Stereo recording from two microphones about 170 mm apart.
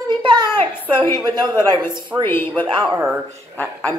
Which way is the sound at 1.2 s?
25° right (ahead or behind).